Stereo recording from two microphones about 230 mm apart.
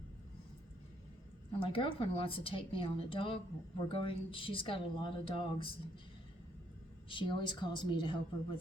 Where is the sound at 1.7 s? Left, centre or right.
Left.